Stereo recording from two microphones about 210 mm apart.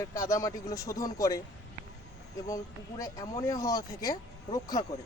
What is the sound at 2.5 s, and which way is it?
Speech, 15° left (ahead or behind).